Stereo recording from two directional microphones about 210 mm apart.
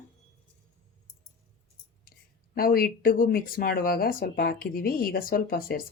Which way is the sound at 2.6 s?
45° left (ahead or behind).